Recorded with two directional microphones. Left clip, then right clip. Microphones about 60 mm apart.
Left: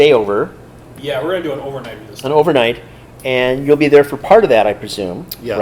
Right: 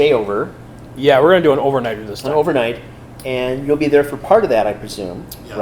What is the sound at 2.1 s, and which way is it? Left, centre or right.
Speech, left.